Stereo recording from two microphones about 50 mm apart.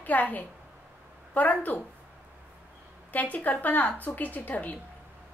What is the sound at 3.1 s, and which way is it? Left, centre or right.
A woman's voice, left.